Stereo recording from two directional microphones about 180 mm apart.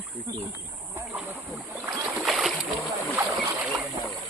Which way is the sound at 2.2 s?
Centre (ahead or behind).